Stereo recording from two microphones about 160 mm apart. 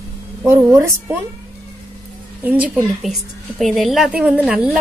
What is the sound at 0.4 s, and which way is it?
Speech, 10° right (ahead or behind).